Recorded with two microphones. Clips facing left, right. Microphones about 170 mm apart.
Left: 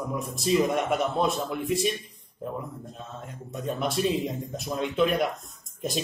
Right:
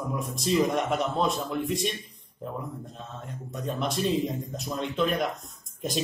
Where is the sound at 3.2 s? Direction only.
Centre (ahead or behind).